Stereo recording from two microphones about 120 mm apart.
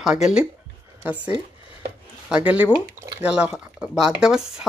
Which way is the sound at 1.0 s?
10° right (ahead or behind).